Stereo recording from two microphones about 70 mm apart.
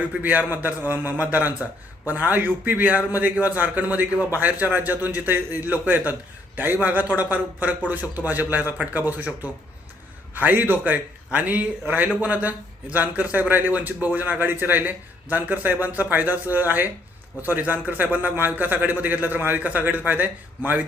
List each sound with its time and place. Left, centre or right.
0.2 s a man's voice: right
7.2 s a man's voice: right